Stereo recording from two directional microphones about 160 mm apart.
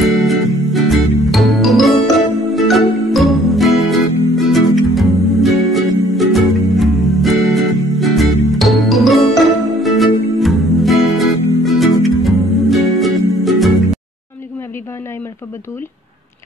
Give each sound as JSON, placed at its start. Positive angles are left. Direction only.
{"t": 0.1, "sound": "music", "side_deg": 0}